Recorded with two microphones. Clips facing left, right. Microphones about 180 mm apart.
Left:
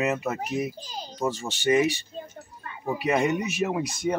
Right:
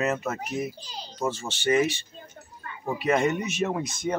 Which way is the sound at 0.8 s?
45° left (ahead or behind).